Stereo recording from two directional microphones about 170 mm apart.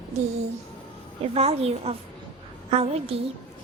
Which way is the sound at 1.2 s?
35° right (ahead or behind).